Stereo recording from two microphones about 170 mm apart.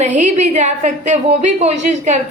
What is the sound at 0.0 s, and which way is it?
A woman's voice, 45° right (ahead or behind).